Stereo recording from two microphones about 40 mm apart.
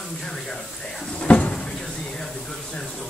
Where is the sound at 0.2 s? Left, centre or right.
Centre.